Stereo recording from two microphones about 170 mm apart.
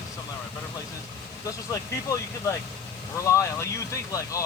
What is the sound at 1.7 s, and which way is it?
Speech, 20° left (ahead or behind).